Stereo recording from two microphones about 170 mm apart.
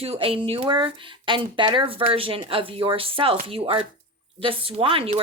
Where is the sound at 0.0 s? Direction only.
35° right (ahead or behind).